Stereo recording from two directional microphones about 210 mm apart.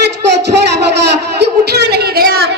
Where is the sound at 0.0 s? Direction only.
55° right (ahead or behind).